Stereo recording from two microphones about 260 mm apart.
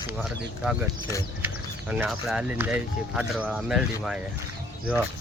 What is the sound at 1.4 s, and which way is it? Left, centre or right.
Speech, centre.